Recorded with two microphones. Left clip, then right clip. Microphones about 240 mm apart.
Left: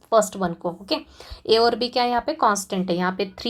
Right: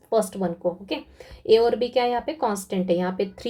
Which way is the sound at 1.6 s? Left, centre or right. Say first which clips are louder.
Left 1 dB; left.